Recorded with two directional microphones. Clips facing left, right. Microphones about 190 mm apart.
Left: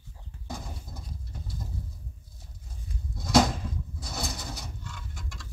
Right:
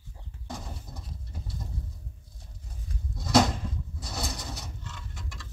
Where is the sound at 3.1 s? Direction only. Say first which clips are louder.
Even; centre (ahead or behind).